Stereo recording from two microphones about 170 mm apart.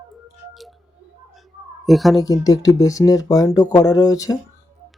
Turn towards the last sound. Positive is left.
turn(degrees=20)  # may be behind; listen again after turning